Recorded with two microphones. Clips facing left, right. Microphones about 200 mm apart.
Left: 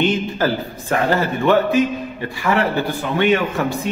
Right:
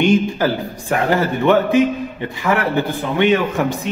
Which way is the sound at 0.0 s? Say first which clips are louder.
Right 3 dB; 15° right (ahead or behind).